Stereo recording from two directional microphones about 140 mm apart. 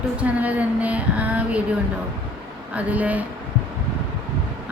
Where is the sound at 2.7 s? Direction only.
10° right (ahead or behind).